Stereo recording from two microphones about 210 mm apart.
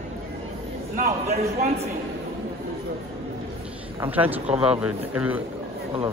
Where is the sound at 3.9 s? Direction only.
10° right (ahead or behind).